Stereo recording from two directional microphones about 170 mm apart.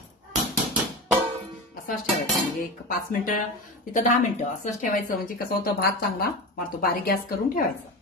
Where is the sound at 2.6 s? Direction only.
60° left (ahead or behind).